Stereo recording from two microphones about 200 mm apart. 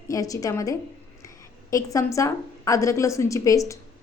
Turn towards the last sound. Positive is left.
turn(degrees=15)  # may be behind; listen again after turning